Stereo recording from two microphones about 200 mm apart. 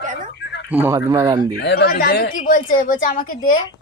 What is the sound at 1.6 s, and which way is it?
A woman's voice, 55° left (ahead or behind).